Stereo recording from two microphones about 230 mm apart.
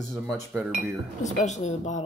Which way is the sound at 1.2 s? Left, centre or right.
Left.